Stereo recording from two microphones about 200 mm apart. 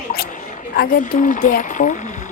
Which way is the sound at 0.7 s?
45° left (ahead or behind).